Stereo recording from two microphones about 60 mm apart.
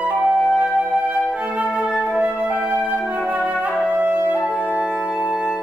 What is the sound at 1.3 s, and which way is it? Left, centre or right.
Flute, right.